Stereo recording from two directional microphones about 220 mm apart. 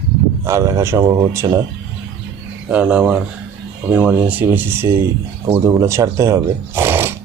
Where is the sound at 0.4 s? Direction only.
15° right (ahead or behind).